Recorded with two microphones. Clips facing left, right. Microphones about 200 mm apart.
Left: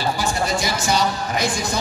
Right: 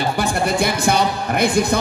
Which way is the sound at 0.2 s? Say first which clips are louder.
Right 4 dB; 60° right (ahead or behind).